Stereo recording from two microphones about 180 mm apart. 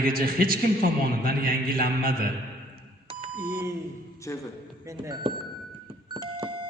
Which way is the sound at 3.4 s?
15° right (ahead or behind).